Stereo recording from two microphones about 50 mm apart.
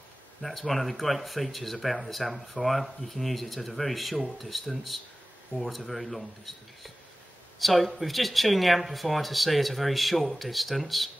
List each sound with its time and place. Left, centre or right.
0.4 s speech: centre